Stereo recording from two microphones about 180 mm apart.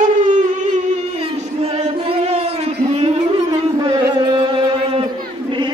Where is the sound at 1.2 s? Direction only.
30° right (ahead or behind).